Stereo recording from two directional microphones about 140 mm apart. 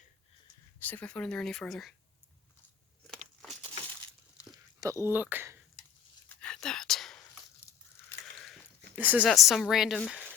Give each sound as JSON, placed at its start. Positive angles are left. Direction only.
{"t": 0.8, "sound": "speech", "side_deg": 10}
{"t": 4.8, "sound": "speech", "side_deg": -20}
{"t": 6.2, "sound": "a sound", "side_deg": 5}
{"t": 8.4, "sound": "a sound", "side_deg": 5}
{"t": 9.0, "sound": "speech", "side_deg": -10}
{"t": 9.2, "sound": "speech", "side_deg": 0}